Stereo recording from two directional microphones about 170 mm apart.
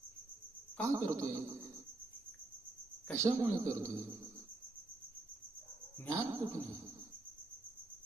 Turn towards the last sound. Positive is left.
turn(degrees=-20)  # may be behind; listen again after turning